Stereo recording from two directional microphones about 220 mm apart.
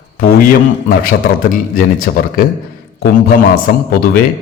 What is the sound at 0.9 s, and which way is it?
A man's voice, 40° left (ahead or behind).